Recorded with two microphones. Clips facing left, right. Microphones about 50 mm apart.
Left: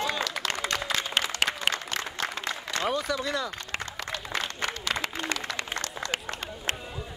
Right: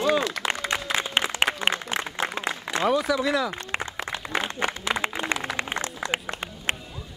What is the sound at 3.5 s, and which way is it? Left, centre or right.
Applause, centre.